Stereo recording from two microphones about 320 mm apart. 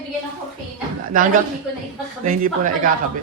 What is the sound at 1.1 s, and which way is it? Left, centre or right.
Speech, right.